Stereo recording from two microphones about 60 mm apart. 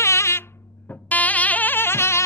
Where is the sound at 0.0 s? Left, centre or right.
Left.